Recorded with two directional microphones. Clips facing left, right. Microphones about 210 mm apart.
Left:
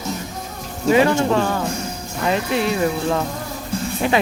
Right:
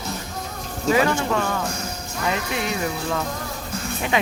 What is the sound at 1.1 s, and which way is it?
Speech, 30° left (ahead or behind).